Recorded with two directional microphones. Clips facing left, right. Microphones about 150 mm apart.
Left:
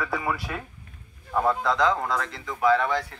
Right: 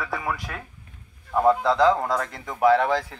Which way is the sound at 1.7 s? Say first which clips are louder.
Right 4 dB; 30° right (ahead or behind).